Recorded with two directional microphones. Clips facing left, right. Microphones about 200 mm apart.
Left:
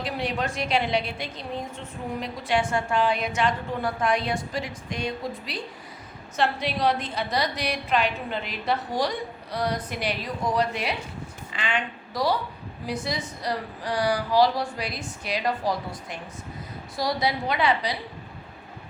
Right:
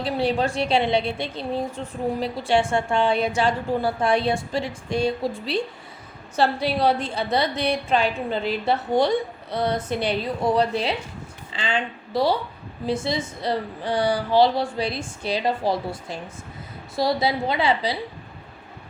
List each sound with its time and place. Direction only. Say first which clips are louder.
0.0 s a woman's voice: right 6 dB; 30° right (ahead or behind)